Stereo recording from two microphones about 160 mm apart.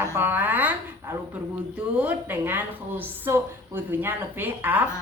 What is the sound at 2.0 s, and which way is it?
A woman's voice, 10° right (ahead or behind).